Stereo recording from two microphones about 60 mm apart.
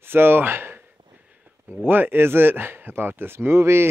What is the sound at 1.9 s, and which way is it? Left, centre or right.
Speech, right.